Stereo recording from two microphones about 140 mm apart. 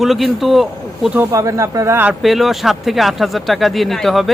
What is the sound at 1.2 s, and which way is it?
Speech, 20° right (ahead or behind).